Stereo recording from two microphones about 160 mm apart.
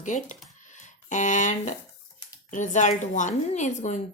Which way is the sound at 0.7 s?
50° left (ahead or behind).